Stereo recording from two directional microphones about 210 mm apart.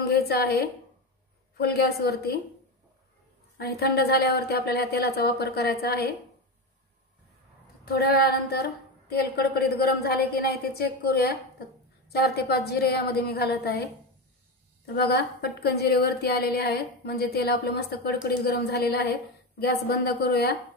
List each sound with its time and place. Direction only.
0.3 s a woman's voice: 50° left (ahead or behind)
3.5 s a woman's voice: 50° left (ahead or behind)
7.8 s a woman's voice: 45° left (ahead or behind)
15.0 s a woman's voice: 50° left (ahead or behind)